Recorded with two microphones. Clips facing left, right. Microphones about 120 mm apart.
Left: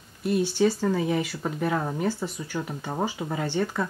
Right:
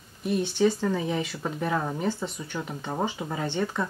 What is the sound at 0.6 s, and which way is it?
Speech, 10° left (ahead or behind).